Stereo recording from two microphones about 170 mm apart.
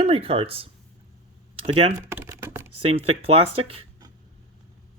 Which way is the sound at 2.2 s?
15° right (ahead or behind).